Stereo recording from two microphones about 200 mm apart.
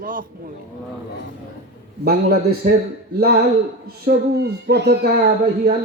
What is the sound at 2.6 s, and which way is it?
Speech, 45° right (ahead or behind).